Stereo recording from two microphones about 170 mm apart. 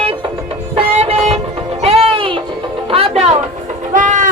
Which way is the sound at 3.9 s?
50° right (ahead or behind).